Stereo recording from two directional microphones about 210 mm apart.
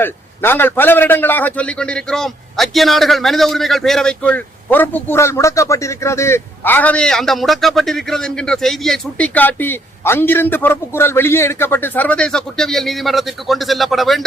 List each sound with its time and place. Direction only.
0.0 s a man's voice: 10° left (ahead or behind)